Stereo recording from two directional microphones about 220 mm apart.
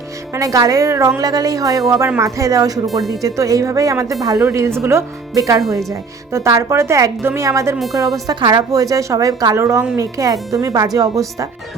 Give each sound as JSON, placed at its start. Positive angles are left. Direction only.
{"t": 0.3, "sound": "speech", "side_deg": -15}